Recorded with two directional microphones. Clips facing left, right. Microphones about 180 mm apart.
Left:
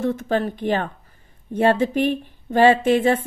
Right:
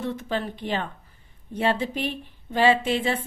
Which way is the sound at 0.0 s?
50° left (ahead or behind).